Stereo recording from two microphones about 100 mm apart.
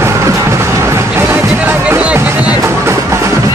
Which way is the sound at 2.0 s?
15° right (ahead or behind).